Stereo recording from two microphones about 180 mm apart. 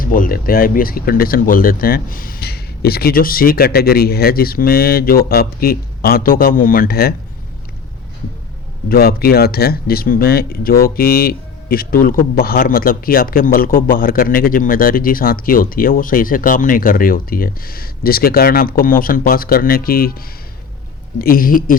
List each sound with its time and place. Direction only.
0.0 s speech: 50° left (ahead or behind)
8.9 s speech: 60° left (ahead or behind)